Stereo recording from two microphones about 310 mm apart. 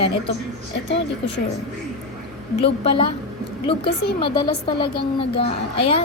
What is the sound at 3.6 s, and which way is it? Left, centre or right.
A woman's voice, centre.